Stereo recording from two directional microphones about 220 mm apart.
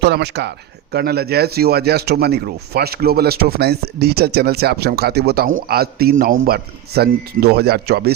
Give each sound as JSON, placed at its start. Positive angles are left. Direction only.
{"t": 0.0, "sound": "speech", "side_deg": -50}